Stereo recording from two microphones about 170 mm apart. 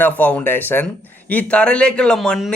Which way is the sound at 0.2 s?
10° left (ahead or behind).